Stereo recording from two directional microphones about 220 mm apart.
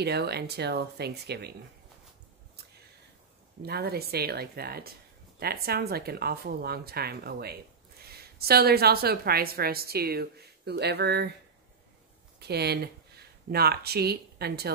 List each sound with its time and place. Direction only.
0.0 s a woman's voice: 50° right (ahead or behind)
3.6 s a woman's voice: 45° right (ahead or behind)
12.4 s speech: 45° right (ahead or behind)